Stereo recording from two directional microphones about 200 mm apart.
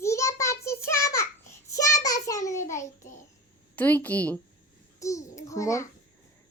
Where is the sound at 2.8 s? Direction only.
40° left (ahead or behind).